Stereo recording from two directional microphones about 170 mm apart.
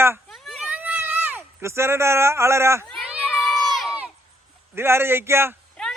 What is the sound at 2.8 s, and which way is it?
Crowd, 5° left (ahead or behind).